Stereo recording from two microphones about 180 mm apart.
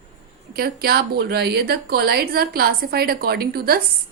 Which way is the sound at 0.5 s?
60° right (ahead or behind).